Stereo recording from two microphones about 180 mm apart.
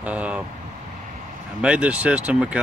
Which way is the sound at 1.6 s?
5° right (ahead or behind).